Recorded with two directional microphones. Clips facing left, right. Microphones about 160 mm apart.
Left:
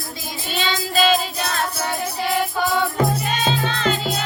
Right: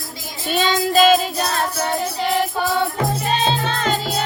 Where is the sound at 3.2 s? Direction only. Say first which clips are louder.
Right 2 dB; 35° right (ahead or behind).